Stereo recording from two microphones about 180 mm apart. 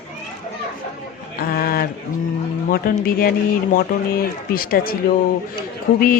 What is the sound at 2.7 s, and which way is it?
Speech, 55° left (ahead or behind).